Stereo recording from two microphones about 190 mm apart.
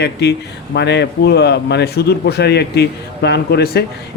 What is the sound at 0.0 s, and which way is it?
Speech, 60° left (ahead or behind).